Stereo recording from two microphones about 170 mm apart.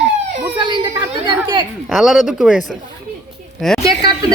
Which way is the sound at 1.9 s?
Centre (ahead or behind).